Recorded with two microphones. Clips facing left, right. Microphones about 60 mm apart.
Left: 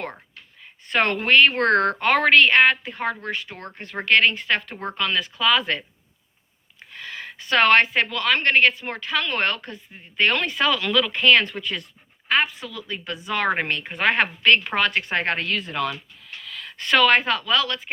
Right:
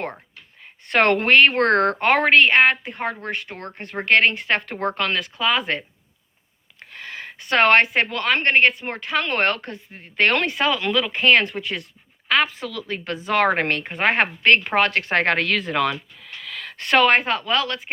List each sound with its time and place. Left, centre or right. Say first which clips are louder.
0.9 s speech: right 3 dB; right
5.4 s speech: left 1 dB; right
6.7 s a sound: right 1 dB; right
7.9 s speech: right 1 dB; right
11.2 s speech: right 2 dB; right
12.3 s a woman's voice: right 2 dB; right
13.9 s a woman's voice: even; right
16.6 s speech: right 1 dB; right